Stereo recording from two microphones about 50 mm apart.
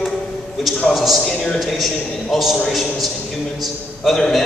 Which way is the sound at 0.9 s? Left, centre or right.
Centre.